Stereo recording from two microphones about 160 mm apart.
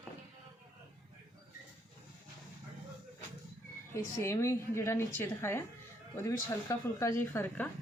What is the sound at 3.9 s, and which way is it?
A woman's voice, 15° left (ahead or behind).